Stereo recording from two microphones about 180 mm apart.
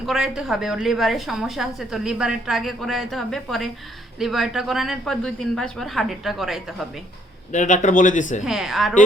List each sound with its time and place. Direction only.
0.0 s a woman's voice: centre (ahead or behind)
7.5 s speech: 45° left (ahead or behind)
8.4 s a woman's voice: centre (ahead or behind)